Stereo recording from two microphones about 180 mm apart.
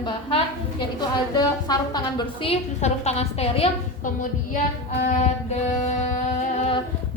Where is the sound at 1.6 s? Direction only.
20° left (ahead or behind).